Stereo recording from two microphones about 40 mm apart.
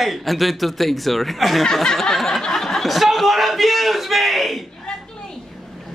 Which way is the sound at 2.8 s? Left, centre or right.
Centre.